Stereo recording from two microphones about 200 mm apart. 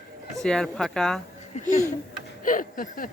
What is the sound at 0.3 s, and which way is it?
Speech, 5° left (ahead or behind).